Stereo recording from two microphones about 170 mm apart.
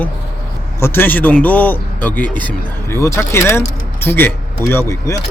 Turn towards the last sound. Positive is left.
turn(degrees=15)  # may be behind; listen again after turning